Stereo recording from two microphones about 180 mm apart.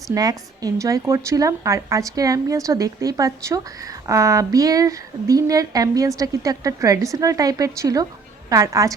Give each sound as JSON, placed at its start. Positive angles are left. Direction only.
{"t": 0.1, "sound": "a woman's voice", "side_deg": -20}